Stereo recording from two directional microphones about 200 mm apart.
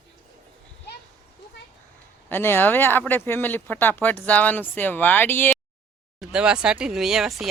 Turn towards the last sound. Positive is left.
turn(degrees=0)  # may be behind; listen again after turning